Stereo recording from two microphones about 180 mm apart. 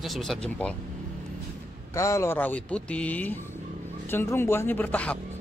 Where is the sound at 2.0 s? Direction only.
15° left (ahead or behind).